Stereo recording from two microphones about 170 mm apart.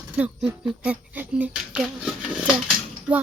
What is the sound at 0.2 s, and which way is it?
Speech, 5° right (ahead or behind).